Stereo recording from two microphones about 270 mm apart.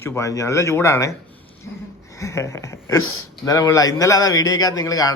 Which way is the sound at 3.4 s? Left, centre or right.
Centre.